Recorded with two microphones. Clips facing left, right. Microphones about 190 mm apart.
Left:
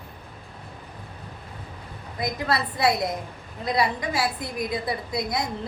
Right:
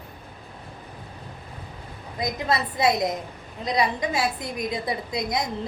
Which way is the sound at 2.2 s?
20° right (ahead or behind).